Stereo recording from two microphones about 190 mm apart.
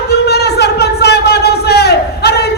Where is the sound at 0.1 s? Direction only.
60° left (ahead or behind).